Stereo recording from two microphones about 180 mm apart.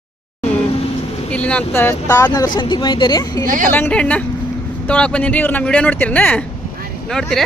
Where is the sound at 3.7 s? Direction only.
10° left (ahead or behind).